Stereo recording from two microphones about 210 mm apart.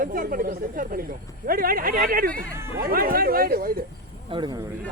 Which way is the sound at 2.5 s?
10° right (ahead or behind).